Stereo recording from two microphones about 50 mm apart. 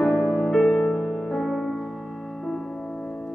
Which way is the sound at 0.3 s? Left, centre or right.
Centre.